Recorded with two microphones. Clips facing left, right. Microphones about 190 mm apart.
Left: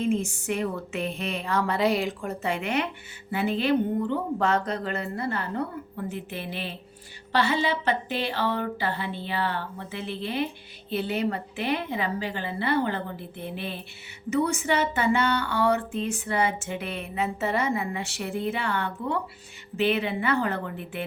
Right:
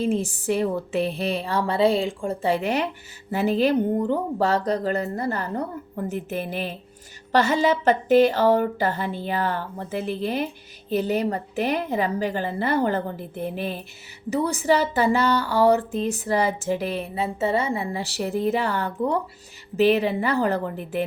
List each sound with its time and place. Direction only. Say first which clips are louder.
0.0 s a woman's voice: right 2 dB; 35° right (ahead or behind)